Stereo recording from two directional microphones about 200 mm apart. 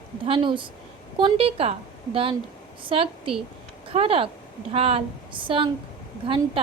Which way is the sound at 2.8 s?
25° right (ahead or behind).